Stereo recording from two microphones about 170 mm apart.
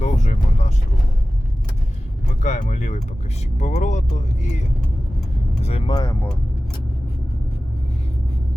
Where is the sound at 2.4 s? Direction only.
45° left (ahead or behind).